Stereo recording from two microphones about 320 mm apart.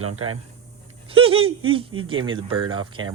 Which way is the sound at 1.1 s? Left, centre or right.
Centre.